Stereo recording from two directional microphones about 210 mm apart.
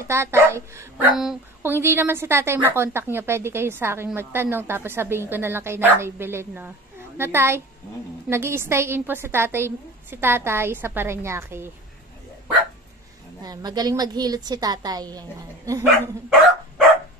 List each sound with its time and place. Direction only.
0.1 s a woman's voice: 10° right (ahead or behind)
1.1 s a woman's voice: centre (ahead or behind)
13.4 s a woman's voice: 20° right (ahead or behind)